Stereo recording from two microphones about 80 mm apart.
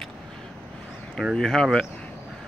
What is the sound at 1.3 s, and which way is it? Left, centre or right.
Speech, centre.